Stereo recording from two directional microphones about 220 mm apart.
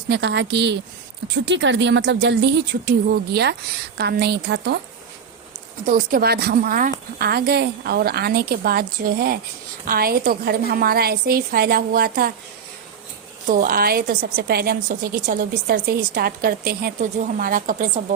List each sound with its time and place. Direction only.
0.1 s a woman's voice: 50° right (ahead or behind)
5.8 s a woman's voice: 40° right (ahead or behind)
13.5 s a woman's voice: 40° right (ahead or behind)